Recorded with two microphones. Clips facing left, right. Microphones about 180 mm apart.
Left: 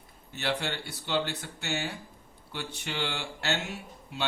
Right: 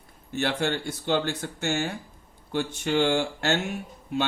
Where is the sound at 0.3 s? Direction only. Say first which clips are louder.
Right 6 dB; 50° right (ahead or behind).